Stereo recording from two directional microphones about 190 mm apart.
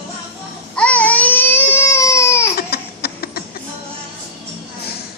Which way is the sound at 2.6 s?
55° left (ahead or behind).